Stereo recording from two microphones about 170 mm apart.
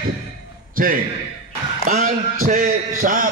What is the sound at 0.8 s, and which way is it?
A man's voice, 55° right (ahead or behind).